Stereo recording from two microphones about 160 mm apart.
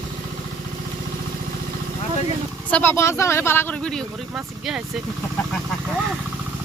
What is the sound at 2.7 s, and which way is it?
Speech, 10° left (ahead or behind).